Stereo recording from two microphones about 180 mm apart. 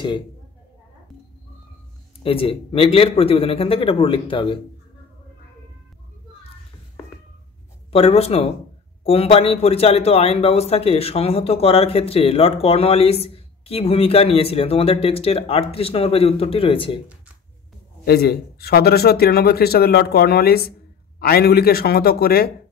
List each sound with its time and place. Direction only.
2.2 s a man's voice: 30° left (ahead or behind)
7.9 s a man's voice: 35° left (ahead or behind)
18.0 s speech: 60° left (ahead or behind)